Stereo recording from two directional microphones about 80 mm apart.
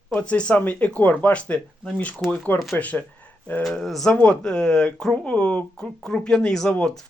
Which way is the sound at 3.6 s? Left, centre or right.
Centre.